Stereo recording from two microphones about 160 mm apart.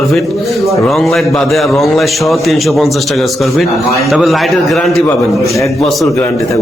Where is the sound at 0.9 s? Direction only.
Centre (ahead or behind).